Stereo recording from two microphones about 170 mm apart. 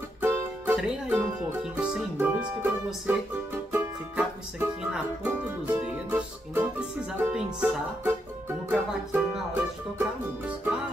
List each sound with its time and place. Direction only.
0.2 s music: 15° right (ahead or behind)
0.7 s speech: 5° right (ahead or behind)
3.7 s music: 5° right (ahead or behind)